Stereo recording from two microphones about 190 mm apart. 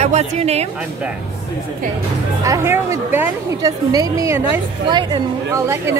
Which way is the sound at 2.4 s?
15° right (ahead or behind).